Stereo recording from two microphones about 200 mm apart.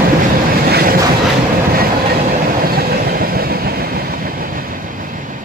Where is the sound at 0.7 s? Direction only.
50° right (ahead or behind).